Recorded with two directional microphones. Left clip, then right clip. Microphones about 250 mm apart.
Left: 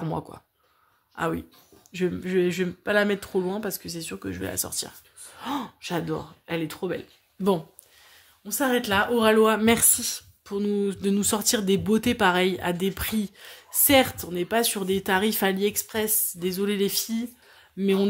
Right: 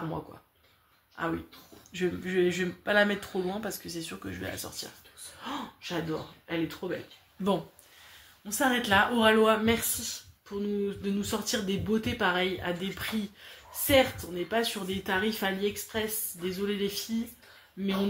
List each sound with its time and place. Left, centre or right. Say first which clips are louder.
1.2 s speech: left 5 dB; left
1.9 s speech: left 4 dB; left
8.5 s speech: left 2 dB; left